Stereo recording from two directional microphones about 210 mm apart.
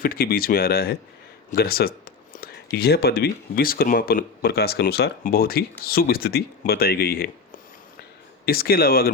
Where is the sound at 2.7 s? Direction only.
50° left (ahead or behind).